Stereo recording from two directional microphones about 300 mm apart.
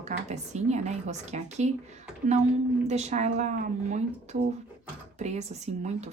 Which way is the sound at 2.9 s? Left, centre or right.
Right.